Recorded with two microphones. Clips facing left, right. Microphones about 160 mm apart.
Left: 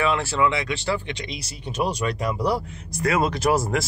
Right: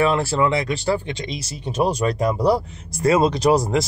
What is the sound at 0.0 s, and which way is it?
Speech, 35° right (ahead or behind).